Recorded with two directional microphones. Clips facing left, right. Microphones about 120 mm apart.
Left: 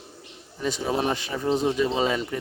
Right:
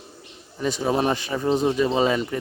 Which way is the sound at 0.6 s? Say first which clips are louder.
Right 3 dB; 50° right (ahead or behind).